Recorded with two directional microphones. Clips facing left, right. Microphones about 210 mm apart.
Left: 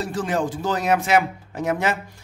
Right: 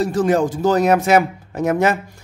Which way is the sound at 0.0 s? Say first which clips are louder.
Right 7 dB; 40° right (ahead or behind).